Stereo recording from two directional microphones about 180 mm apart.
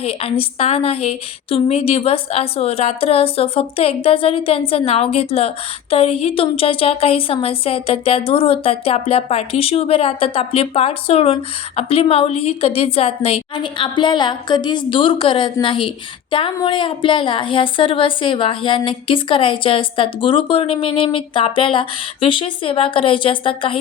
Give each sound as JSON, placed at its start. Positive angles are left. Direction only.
{"t": 0.0, "sound": "a woman's voice", "side_deg": 35}